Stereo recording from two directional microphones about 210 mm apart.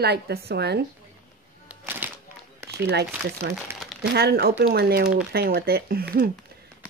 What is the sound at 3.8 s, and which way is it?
Crumpling, centre (ahead or behind).